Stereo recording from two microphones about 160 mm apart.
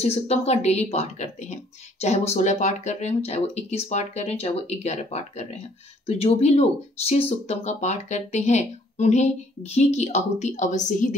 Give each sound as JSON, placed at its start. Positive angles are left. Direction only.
{"t": 0.0, "sound": "speech", "side_deg": 40}